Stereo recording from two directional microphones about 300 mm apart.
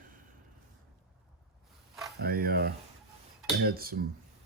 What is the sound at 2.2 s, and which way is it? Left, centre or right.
Speech, right.